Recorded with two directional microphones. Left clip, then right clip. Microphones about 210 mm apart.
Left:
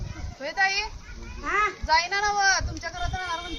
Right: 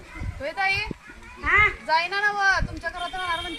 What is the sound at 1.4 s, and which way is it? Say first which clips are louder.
Children playing: right 6 dB; 35° right (ahead or behind).